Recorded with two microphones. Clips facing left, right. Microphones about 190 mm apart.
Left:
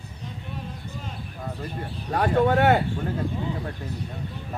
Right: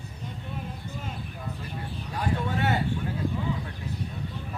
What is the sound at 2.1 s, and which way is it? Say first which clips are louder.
Speech: left 9 dB; 60° left (ahead or behind).